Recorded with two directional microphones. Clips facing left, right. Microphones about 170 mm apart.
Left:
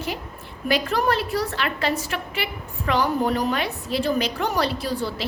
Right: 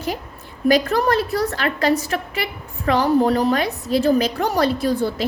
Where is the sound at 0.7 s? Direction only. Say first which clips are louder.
Right 5 dB; 40° right (ahead or behind).